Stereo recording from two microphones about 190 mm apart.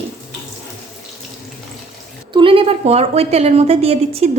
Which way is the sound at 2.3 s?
30° right (ahead or behind).